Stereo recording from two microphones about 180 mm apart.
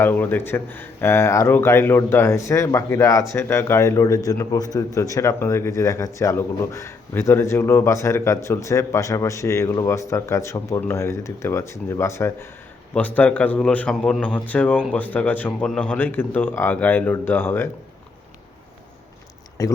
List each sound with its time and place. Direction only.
0.0 s speech: 10° left (ahead or behind)
19.6 s speech: 20° left (ahead or behind)